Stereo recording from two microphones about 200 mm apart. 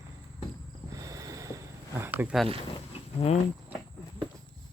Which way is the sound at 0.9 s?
15° right (ahead or behind).